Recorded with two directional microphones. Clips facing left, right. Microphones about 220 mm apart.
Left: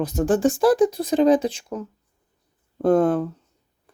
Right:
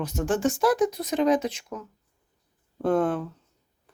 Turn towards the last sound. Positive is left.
turn(degrees=40)  # may be behind; listen again after turning